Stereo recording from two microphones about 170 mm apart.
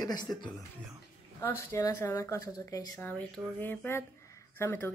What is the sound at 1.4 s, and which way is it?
A woman's voice, 15° left (ahead or behind).